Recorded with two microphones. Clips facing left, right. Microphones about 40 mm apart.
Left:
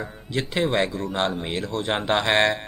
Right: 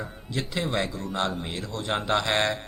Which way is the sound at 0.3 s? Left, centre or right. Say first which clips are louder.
Left 6 dB; left.